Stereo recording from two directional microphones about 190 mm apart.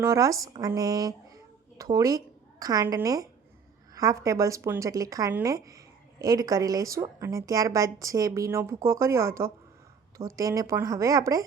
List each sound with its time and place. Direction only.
0.0 s a woman's voice: 15° right (ahead or behind)